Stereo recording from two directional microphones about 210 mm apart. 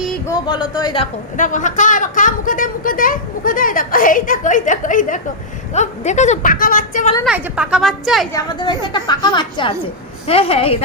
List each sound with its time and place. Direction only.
0.3 s a woman's voice: 20° left (ahead or behind)
1.4 s a woman's voice: 35° left (ahead or behind)
7.3 s speech: 5° right (ahead or behind)
8.3 s a woman's voice: 20° left (ahead or behind)